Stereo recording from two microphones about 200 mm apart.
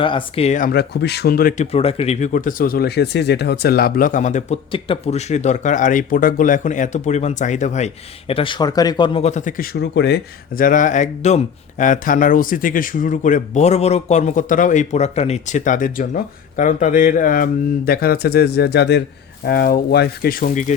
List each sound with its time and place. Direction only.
0.0 s speech: 25° left (ahead or behind); by 1.6 s 45° left (ahead or behind)
1.7 s speech: 30° left (ahead or behind)